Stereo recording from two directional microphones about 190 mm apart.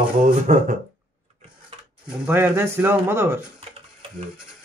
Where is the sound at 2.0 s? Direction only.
5° right (ahead or behind).